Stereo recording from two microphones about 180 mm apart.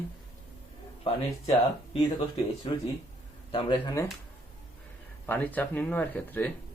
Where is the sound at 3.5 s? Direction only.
30° left (ahead or behind).